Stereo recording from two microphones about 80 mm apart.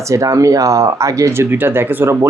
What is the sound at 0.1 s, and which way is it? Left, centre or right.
Speech, right.